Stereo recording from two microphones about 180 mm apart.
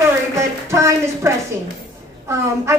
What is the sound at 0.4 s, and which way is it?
A woman's voice, 15° right (ahead or behind).